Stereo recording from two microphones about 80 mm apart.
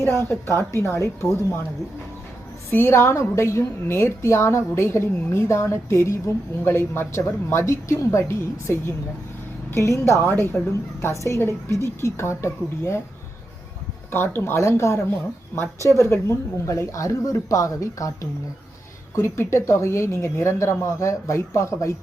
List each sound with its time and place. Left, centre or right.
0.3 s a woman's voice: left
2.7 s a woman's voice: left
10.2 s speech: left
11.2 s a woman's voice: left
14.1 s a woman's voice: left
15.8 s a woman's voice: right
16.0 s a woman's voice: left